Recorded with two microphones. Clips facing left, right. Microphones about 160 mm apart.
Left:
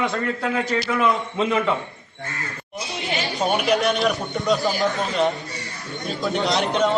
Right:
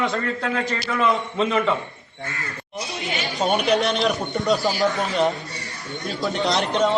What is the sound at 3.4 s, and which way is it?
A man's voice, centre (ahead or behind).